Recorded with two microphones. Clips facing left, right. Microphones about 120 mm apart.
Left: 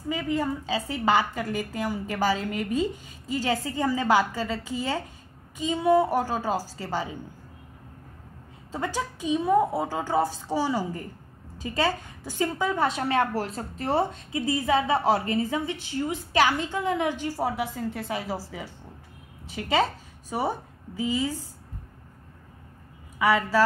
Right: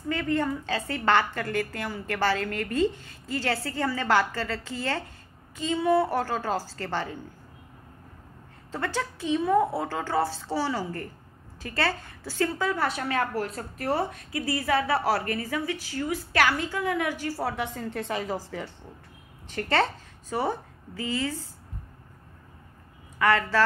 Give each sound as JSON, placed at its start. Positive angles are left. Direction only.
{"t": 0.1, "sound": "a woman's voice", "side_deg": 10}
{"t": 8.7, "sound": "a woman's voice", "side_deg": 15}
{"t": 13.0, "sound": "a woman's voice", "side_deg": 30}
{"t": 19.4, "sound": "a woman's voice", "side_deg": 10}
{"t": 23.1, "sound": "a woman's voice", "side_deg": 10}